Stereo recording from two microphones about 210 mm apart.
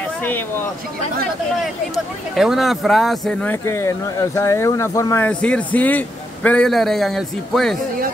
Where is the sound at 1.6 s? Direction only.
Centre (ahead or behind).